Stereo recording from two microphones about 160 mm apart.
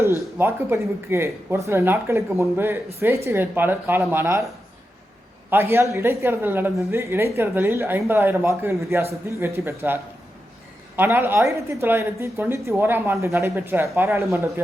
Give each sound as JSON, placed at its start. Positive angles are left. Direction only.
{"t": 0.2, "sound": "a woman's voice", "side_deg": -15}
{"t": 5.5, "sound": "a woman's voice", "side_deg": -15}